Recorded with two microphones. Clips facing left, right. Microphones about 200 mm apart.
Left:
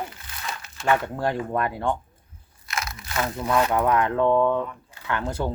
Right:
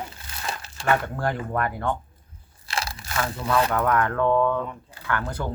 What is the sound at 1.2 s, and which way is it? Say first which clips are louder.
Speech: left 1 dB; 25° left (ahead or behind).